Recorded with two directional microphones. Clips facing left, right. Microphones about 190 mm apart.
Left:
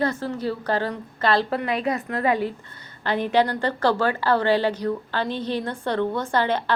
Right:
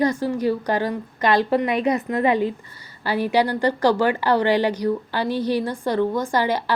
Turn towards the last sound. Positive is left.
turn(degrees=-10)  # may be behind; listen again after turning